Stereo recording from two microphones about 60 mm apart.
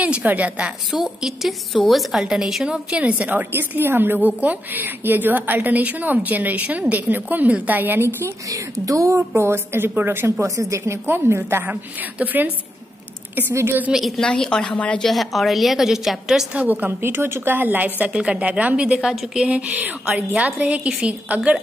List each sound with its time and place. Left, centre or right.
0.0 s a woman's voice: right
0.9 s a woman's voice: centre; by 8.1 s right
8.5 s a woman's voice: right
9.3 s speech: right
10.4 s a woman's voice: right
11.1 s speech: right
11.6 s a woman's voice: right
13.7 s a woman's voice: right
13.9 s a woman's voice: centre
14.2 s a woman's voice: centre
15.0 s a woman's voice: centre
16.5 s speech: right
18.1 s a woman's voice: centre